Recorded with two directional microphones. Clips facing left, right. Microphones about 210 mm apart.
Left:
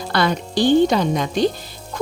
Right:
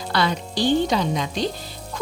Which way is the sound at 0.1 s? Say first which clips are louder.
Left 3 dB; 50° left (ahead or behind).